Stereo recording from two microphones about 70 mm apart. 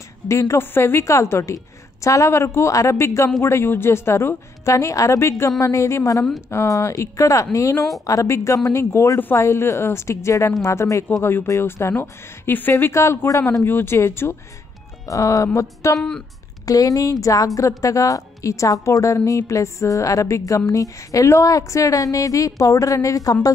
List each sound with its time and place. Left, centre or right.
0.3 s a woman's voice: left
1.0 s a woman's voice: left
4.7 s a woman's voice: left
12.0 s a woman's voice: left
12.9 s a woman's voice: left
15.0 s a woman's voice: left
16.0 s speech: centre
16.6 s a woman's voice: left